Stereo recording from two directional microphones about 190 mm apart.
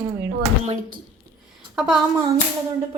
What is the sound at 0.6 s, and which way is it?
Speech, 35° right (ahead or behind).